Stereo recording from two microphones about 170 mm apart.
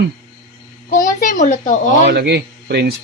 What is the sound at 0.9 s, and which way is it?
Speech, 50° left (ahead or behind).